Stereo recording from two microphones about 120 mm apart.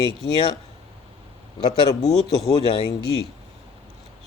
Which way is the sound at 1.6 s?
35° left (ahead or behind).